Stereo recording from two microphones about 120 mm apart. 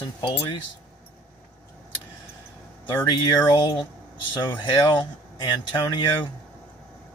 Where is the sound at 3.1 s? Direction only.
35° left (ahead or behind).